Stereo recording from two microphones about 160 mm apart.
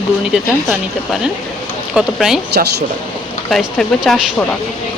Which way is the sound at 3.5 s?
Centre (ahead or behind).